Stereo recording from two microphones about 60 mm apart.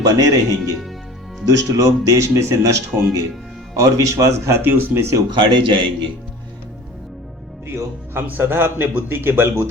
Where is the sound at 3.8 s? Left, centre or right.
Right.